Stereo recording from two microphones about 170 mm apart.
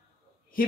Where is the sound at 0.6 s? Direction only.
55° left (ahead or behind).